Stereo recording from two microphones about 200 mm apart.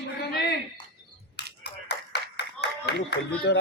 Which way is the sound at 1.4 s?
55° left (ahead or behind).